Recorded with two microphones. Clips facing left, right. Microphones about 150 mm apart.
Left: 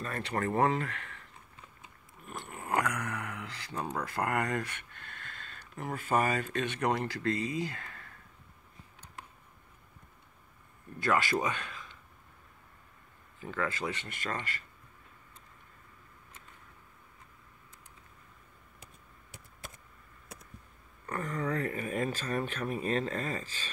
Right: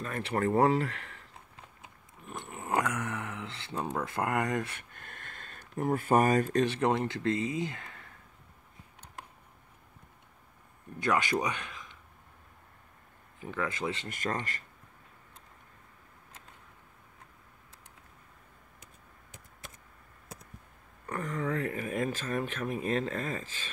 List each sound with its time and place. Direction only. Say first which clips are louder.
0.2 s speech: right 3 dB; 25° right (ahead or behind)
2.2 s speech: right 1 dB; 20° right (ahead or behind)
4.7 s speech: even; 45° right (ahead or behind); by 8.1 s 20° right (ahead or behind)
11.0 s speech: even; 20° right (ahead or behind)
13.4 s speech: right 1 dB; 15° right (ahead or behind)
14.0 s speech: right 3 dB; 40° right (ahead or behind)
21.1 s speech: right 1 dB; 10° right (ahead or behind)